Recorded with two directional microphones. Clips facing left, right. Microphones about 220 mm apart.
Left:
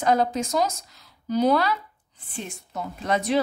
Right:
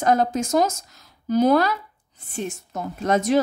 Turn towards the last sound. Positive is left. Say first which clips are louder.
# right 4 dB
turn(degrees=-45)  # may be behind; listen again after turning